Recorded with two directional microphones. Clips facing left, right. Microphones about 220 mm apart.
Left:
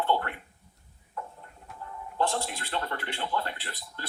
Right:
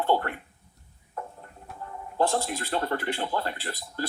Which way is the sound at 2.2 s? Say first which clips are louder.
Right 4 dB; 40° right (ahead or behind).